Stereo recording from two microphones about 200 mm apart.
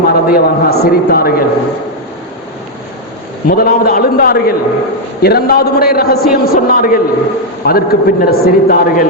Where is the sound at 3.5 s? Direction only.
50° left (ahead or behind).